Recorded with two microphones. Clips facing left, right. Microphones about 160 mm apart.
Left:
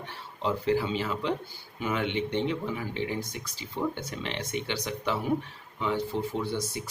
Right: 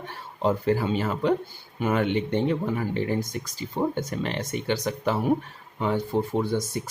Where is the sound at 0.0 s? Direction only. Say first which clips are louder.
Right 6 dB; 50° right (ahead or behind).